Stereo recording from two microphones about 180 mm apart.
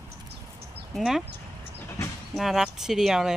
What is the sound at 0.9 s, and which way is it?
Speech, centre (ahead or behind).